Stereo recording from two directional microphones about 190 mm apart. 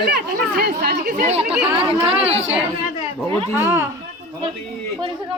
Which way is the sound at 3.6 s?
15° right (ahead or behind).